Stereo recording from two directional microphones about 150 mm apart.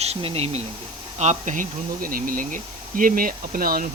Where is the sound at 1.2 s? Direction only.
55° right (ahead or behind); by 3.9 s 75° right (ahead or behind).